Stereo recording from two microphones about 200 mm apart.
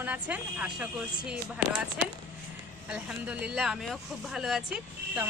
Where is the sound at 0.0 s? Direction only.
10° right (ahead or behind).